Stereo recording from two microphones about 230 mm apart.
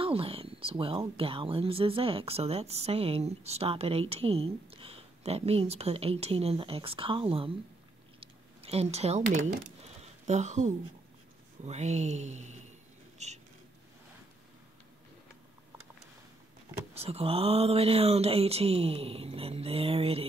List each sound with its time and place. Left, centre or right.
0.0 s speech: right
8.2 s a sound: right
10.2 s speech: right
16.9 s speech: right